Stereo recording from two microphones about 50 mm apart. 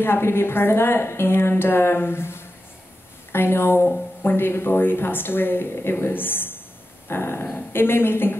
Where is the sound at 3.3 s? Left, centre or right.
Left.